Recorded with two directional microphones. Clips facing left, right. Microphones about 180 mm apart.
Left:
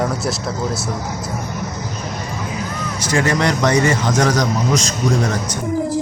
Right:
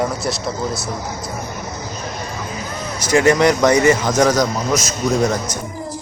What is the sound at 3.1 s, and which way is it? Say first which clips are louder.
Speech: right 5 dB; 25° right (ahead or behind).